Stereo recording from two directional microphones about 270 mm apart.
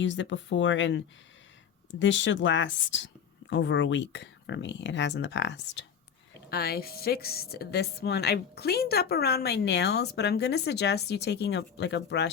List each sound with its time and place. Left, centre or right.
0.0 s a woman's voice: left